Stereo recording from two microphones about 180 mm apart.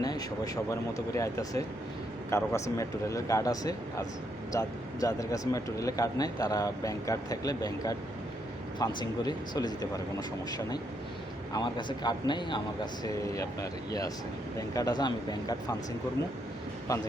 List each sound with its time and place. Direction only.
0.0 s speech: 20° left (ahead or behind)
11.5 s speech: 25° left (ahead or behind)
16.9 s speech: 20° left (ahead or behind)